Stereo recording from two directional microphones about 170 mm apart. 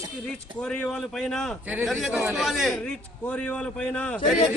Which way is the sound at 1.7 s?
10° right (ahead or behind).